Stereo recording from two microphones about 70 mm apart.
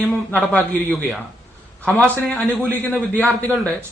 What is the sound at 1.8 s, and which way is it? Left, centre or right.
A man's voice, centre.